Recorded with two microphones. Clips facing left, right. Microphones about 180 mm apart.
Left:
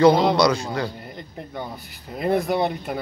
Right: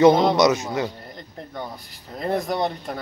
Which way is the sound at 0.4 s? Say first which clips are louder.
Right 1 dB; 20° right (ahead or behind).